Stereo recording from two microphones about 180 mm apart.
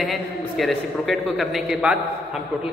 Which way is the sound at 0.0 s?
Centre (ahead or behind).